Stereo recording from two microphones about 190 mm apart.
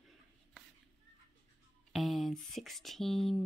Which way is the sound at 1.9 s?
Centre (ahead or behind).